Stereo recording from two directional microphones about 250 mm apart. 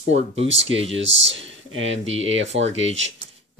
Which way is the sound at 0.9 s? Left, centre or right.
Right.